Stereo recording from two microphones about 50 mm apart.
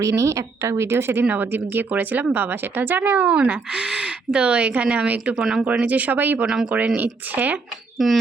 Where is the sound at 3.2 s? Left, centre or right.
Right.